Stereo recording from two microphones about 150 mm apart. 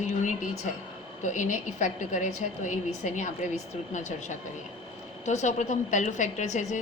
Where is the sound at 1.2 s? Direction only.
55° left (ahead or behind).